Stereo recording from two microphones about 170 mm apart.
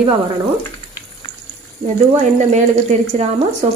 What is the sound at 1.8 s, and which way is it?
Speech, 45° right (ahead or behind).